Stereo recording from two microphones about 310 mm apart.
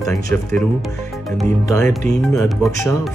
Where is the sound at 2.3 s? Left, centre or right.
Centre.